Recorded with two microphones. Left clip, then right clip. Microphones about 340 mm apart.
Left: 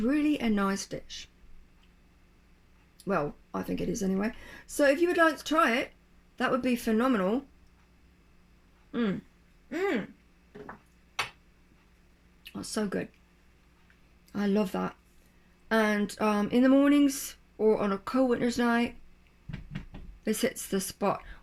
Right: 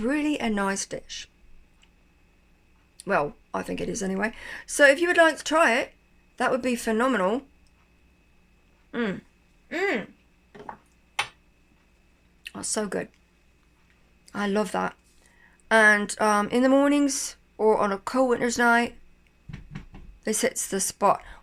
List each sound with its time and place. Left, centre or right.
0.0 s speech: right
3.0 s speech: right
8.9 s a sound: right
12.4 s speech: right
14.3 s speech: right
20.2 s speech: centre